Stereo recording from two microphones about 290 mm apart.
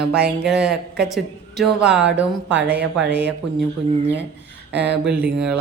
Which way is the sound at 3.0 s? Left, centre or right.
Right.